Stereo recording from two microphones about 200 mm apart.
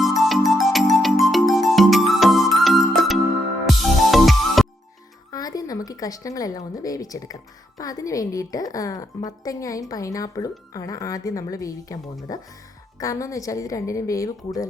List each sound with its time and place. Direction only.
0.0 s music: centre (ahead or behind)
5.3 s a woman's voice: 20° left (ahead or behind)